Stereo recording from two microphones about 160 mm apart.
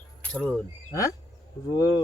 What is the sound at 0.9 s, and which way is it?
Speech, 20° left (ahead or behind).